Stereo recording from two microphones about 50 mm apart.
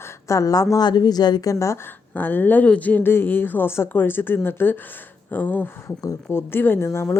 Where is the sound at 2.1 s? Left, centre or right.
Left.